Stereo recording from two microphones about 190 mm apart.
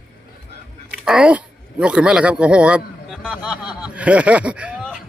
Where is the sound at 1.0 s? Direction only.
5° right (ahead or behind).